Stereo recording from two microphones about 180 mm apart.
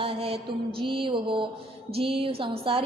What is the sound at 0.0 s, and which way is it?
Mantra, 30° right (ahead or behind).